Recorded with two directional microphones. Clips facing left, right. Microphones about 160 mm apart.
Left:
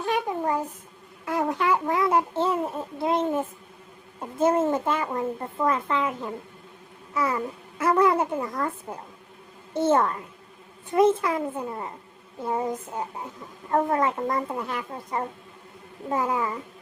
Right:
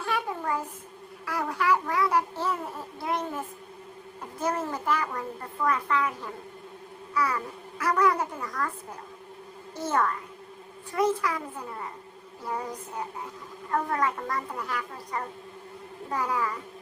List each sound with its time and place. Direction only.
0.0 s babbling: 20° left (ahead or behind)
4.4 s a sound: 25° left (ahead or behind)
7.1 s babbling: 25° left (ahead or behind)
9.7 s a woman's voice: 25° left (ahead or behind)